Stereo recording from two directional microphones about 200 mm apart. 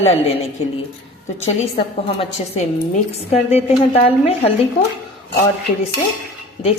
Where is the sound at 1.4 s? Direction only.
30° left (ahead or behind).